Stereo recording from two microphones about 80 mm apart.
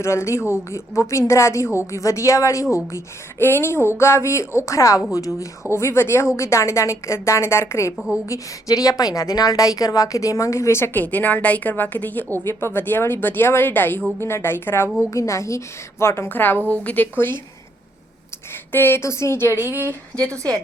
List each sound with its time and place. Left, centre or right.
0.0 s a woman's voice: left
8.3 s a woman's voice: left
11.0 s a woman's voice: left
15.1 s a woman's voice: left
18.7 s a woman's voice: left
19.5 s speech: right
20.2 s a woman's voice: right